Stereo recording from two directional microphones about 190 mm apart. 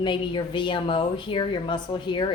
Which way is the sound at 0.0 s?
25° left (ahead or behind).